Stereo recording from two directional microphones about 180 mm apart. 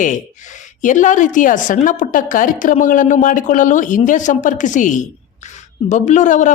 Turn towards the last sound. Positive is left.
turn(degrees=45)  # may be behind; listen again after turning